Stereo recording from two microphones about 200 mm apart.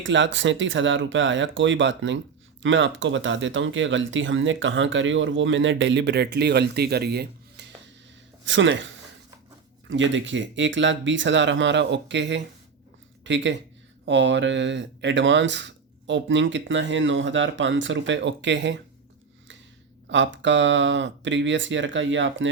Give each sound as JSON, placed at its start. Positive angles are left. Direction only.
{"t": 0.0, "sound": "speech", "side_deg": -65}
{"t": 9.9, "sound": "speech", "side_deg": -70}
{"t": 20.1, "sound": "speech", "side_deg": -65}